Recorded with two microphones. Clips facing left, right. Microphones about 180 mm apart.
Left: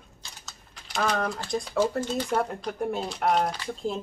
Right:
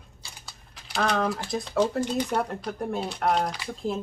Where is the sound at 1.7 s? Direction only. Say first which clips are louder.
Right 2 dB; 10° left (ahead or behind).